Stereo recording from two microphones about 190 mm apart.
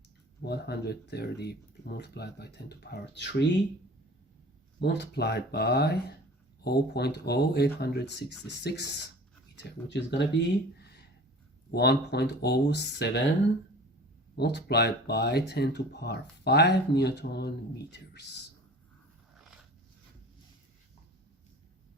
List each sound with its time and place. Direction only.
0.4 s speech: 60° left (ahead or behind)
4.8 s speech: 60° left (ahead or behind)
10.8 s a sound: 55° left (ahead or behind)
11.7 s speech: 60° left (ahead or behind)
14.3 s speech: 60° left (ahead or behind)